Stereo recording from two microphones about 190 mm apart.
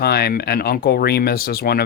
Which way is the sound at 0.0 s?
55° left (ahead or behind).